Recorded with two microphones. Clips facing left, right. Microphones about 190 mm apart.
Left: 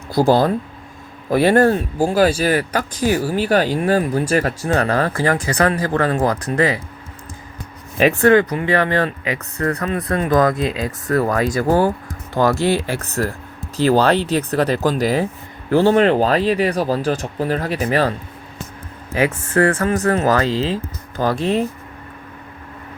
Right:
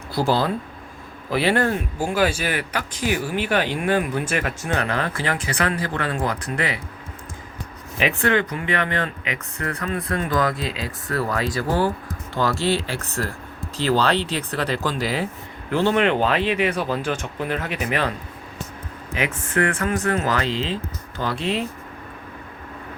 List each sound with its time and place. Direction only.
0.1 s speech: 45° left (ahead or behind)
7.9 s speech: 45° left (ahead or behind)
19.1 s speech: 35° left (ahead or behind)